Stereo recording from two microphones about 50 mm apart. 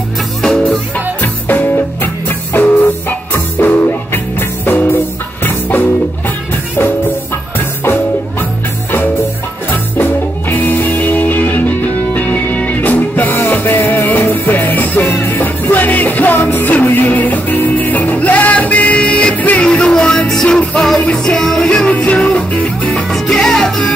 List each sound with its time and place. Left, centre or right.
0.9 s music: left
2.7 s music: left
7.8 s music: left
10.8 s music: left
20.8 s music: centre; by 23.0 s left
23.2 s music: centre